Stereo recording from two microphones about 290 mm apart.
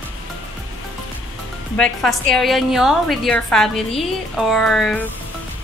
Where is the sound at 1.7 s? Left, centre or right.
Centre.